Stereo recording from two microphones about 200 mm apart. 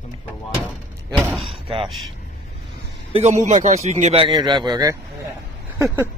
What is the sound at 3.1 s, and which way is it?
A man's voice, 35° right (ahead or behind).